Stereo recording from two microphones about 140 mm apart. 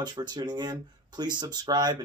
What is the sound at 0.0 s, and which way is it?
Speech, 30° right (ahead or behind).